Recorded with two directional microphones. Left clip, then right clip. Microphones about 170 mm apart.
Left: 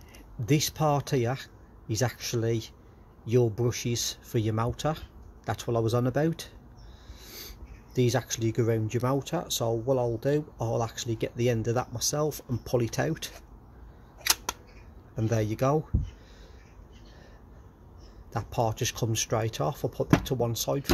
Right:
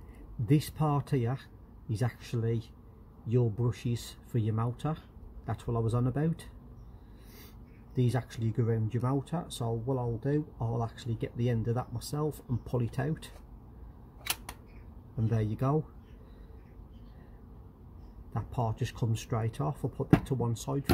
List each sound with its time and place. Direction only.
0.5 s speech: 30° left (ahead or behind)
15.2 s speech: 35° left (ahead or behind)
18.3 s speech: 30° left (ahead or behind)